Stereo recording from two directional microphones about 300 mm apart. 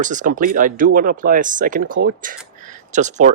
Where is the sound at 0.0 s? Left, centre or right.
Right.